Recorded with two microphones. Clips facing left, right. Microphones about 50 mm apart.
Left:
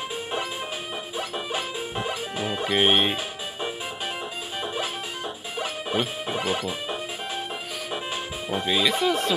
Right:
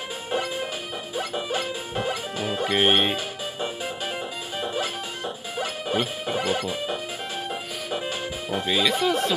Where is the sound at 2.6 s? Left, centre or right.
Centre.